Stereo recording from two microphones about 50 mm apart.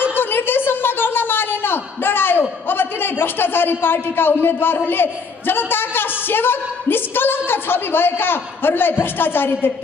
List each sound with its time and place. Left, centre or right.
0.1 s speech: left